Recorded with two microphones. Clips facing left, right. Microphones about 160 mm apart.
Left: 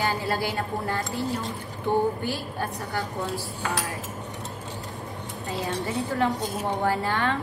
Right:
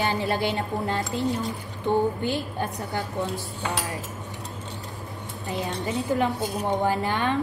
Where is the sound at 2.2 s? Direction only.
20° right (ahead or behind).